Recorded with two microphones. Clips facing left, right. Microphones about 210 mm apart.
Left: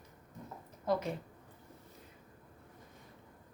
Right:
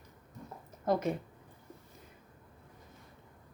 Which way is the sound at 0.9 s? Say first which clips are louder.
Right 2 dB; 50° right (ahead or behind).